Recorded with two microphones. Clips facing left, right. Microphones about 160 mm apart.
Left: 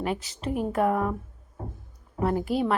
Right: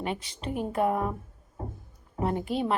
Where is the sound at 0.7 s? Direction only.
30° right (ahead or behind).